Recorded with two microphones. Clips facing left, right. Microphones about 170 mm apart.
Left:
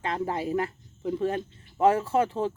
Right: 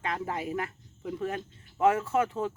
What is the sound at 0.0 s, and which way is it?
Speech, 30° left (ahead or behind).